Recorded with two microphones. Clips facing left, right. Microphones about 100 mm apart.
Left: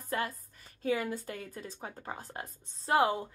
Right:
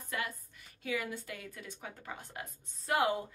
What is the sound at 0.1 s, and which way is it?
A woman's voice, 40° left (ahead or behind).